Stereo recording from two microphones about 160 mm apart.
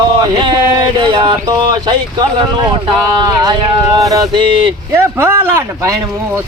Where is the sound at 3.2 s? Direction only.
25° right (ahead or behind).